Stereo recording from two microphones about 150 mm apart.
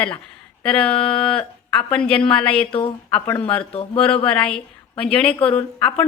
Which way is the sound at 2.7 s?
40° left (ahead or behind).